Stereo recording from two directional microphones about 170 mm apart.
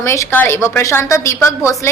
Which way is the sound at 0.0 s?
15° left (ahead or behind).